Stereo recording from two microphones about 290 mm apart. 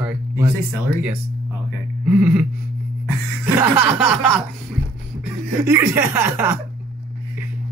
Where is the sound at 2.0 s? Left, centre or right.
Centre.